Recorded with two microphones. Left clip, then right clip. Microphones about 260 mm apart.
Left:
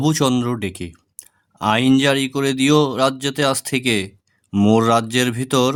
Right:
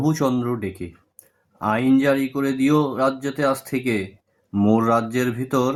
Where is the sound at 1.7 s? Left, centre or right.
Left.